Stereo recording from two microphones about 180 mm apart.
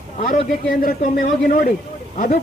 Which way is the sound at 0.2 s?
50° left (ahead or behind).